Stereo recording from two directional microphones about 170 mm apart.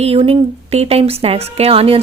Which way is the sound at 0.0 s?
35° right (ahead or behind).